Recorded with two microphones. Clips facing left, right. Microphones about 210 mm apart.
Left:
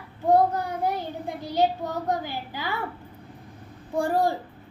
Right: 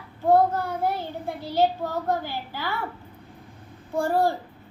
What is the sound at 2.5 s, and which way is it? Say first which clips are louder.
Speech: right 1 dB; 15° left (ahead or behind).